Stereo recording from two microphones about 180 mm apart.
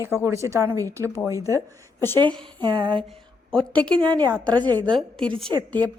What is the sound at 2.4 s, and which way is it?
Speech, 25° right (ahead or behind).